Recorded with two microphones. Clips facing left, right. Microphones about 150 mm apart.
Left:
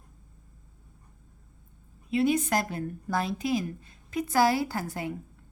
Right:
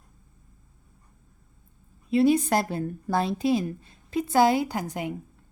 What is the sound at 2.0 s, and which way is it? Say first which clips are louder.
A woman's voice: right 4 dB; 35° right (ahead or behind).